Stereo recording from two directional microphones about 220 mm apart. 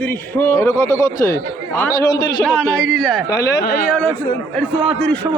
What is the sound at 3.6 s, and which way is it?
Speech, 45° left (ahead or behind).